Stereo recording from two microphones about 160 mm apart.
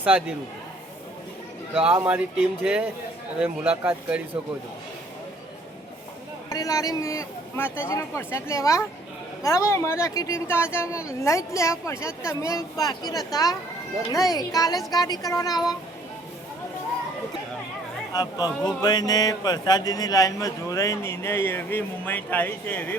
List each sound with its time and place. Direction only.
1.9 s speech: 10° right (ahead or behind)
6.5 s speech: 20° left (ahead or behind)
18.1 s speech: 25° left (ahead or behind)